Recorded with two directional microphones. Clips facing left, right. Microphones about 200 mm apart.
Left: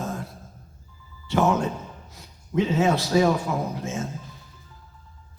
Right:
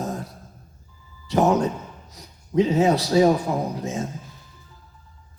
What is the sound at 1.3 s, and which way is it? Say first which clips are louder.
A man's voice: right 3 dB; 35° right (ahead or behind).